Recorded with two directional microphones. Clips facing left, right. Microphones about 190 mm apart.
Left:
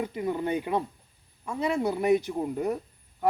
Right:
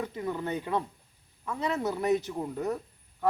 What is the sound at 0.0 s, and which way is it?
Speech, 15° left (ahead or behind).